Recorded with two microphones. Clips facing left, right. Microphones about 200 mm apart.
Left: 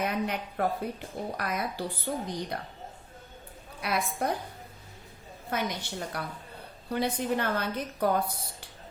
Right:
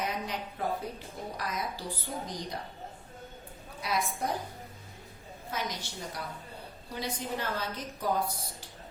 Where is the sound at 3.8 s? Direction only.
60° left (ahead or behind).